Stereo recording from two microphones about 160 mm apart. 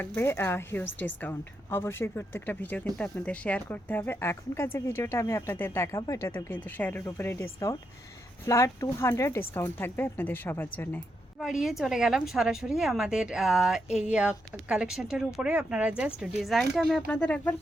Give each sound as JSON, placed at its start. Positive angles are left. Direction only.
{"t": 0.0, "sound": "speech", "side_deg": 15}
{"t": 11.3, "sound": "a woman's voice", "side_deg": 0}